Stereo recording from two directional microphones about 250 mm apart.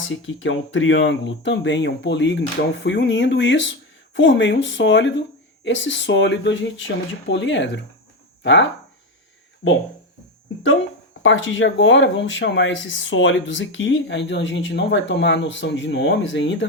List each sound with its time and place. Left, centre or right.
0.4 s speech: left
9.6 s speech: left
11.2 s speech: left